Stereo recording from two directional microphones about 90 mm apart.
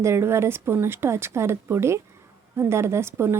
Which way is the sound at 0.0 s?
30° right (ahead or behind).